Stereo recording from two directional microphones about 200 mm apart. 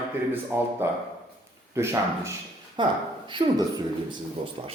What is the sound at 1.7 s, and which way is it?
A man's voice, 15° right (ahead or behind).